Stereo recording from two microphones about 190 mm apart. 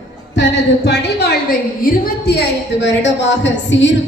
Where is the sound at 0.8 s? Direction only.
60° left (ahead or behind).